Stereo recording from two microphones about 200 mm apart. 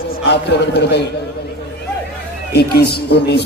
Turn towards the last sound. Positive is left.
turn(degrees=55)  # may be behind; listen again after turning